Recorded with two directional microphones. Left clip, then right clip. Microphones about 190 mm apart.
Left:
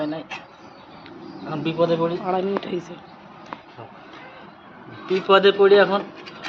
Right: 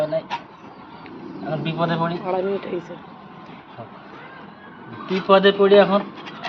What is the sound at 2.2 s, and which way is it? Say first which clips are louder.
Speech: even; 25° left (ahead or behind).